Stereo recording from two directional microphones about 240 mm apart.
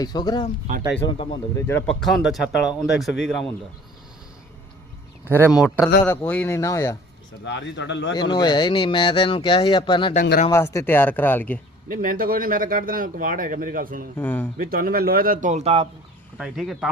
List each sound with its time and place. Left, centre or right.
0.0 s speech: centre
5.2 s speech: centre
6.1 s speech: centre
7.4 s speech: left
8.1 s speech: centre
10.2 s speech: left
10.5 s speech: centre
11.9 s speech: right
14.2 s speech: centre
14.6 s speech: right
16.4 s speech: centre